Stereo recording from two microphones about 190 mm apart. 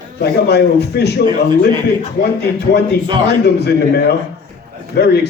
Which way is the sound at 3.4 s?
60° left (ahead or behind).